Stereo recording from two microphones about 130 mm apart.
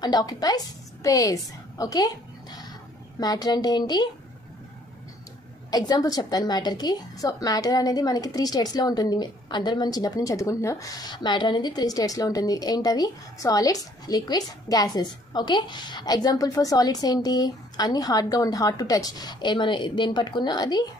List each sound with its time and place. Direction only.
0.0 s a woman's voice: 30° left (ahead or behind)
5.7 s a woman's voice: 30° left (ahead or behind)